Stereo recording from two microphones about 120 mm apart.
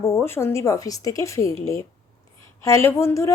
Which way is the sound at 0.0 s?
20° left (ahead or behind).